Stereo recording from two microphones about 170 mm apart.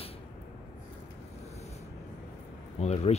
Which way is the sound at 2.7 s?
40° left (ahead or behind).